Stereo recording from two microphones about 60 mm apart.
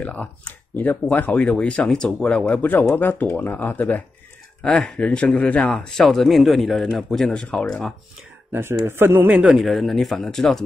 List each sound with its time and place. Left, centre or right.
0.0 s speech: left
1.9 s speech: centre; by 4.0 s left
4.6 s speech: centre
6.0 s speech: centre
8.5 s a man's voice: right
9.3 s a man's voice: centre
9.6 s speech: centre